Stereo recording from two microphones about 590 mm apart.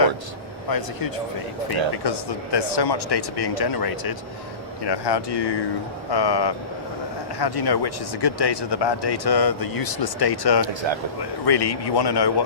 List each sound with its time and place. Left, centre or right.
0.7 s speech: left